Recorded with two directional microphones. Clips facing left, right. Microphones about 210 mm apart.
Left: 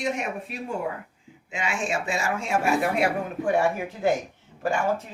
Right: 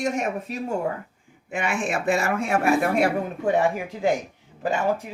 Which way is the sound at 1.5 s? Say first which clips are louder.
Right 3 dB; 55° right (ahead or behind).